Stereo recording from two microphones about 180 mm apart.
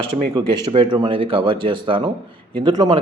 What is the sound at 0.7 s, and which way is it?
Speech, 25° right (ahead or behind).